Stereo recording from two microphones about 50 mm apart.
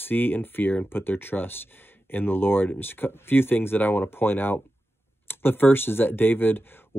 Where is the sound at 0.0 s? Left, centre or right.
Left.